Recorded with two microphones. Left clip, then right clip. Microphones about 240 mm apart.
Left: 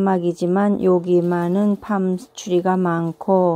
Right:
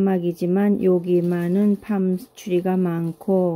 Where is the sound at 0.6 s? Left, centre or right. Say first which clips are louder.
Even; left.